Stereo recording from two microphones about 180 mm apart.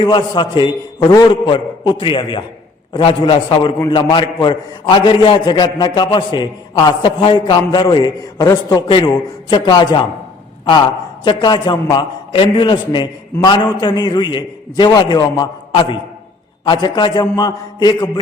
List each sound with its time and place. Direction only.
0.0 s a man's voice: 25° left (ahead or behind)